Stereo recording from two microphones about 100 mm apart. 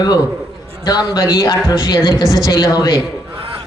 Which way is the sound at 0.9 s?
45° left (ahead or behind).